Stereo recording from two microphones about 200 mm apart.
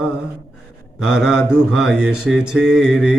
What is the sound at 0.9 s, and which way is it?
Mantra, 5° right (ahead or behind).